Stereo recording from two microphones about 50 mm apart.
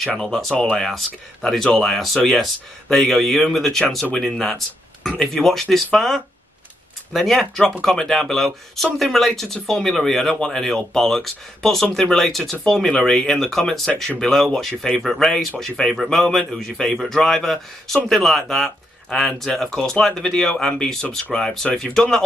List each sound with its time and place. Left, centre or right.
0.0 s speech: centre